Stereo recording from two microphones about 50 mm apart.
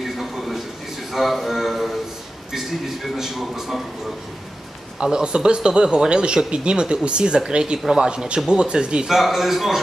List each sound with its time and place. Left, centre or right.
0.0 s a sound: centre
3.2 s speech: centre
5.0 s speech: centre
9.1 s a man's voice: centre